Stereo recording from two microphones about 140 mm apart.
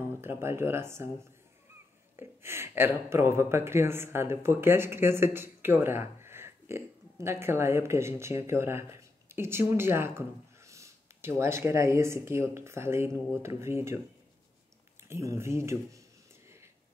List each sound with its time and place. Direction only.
0.0 s speech: 15° right (ahead or behind)
2.1 s speech: 15° right (ahead or behind)
15.0 s speech: 20° right (ahead or behind)
16.4 s a sound: 20° right (ahead or behind)